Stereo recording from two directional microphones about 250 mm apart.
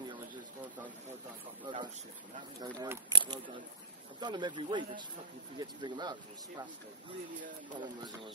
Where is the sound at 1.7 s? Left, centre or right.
Centre.